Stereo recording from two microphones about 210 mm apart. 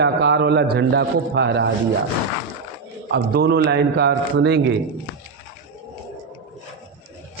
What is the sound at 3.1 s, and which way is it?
A man's voice, 50° right (ahead or behind).